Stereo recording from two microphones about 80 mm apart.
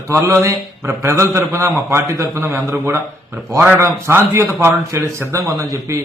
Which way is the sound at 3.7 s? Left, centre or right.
Right.